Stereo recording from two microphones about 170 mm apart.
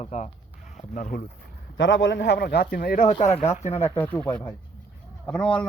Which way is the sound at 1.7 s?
90° left.